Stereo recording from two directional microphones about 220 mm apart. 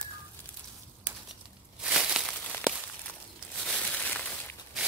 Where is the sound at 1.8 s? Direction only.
5° right (ahead or behind).